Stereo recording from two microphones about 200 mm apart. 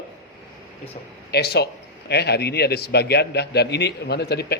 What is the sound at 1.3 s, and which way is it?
A man's voice, 55° left (ahead or behind).